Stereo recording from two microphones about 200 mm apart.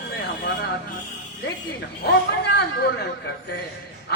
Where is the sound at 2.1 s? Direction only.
55° left (ahead or behind).